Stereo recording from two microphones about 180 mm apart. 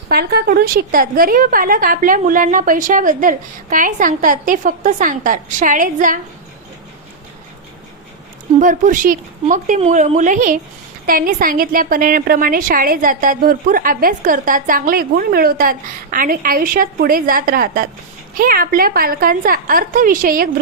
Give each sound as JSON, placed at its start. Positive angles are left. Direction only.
{"t": 0.1, "sound": "a woman's voice", "side_deg": -60}
{"t": 8.5, "sound": "a woman's voice", "side_deg": -45}